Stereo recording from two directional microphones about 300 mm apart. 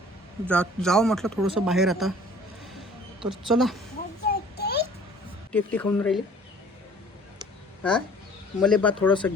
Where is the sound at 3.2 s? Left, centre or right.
Centre.